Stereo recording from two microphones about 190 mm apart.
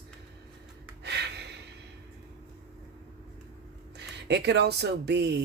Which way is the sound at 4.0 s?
60° right (ahead or behind).